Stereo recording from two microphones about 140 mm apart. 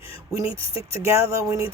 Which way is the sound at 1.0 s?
20° right (ahead or behind).